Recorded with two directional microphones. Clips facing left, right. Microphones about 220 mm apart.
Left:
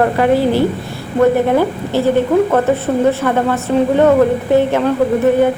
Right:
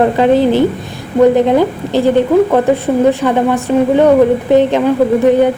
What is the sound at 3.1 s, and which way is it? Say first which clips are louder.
A woman's voice: right 3 dB; 15° right (ahead or behind).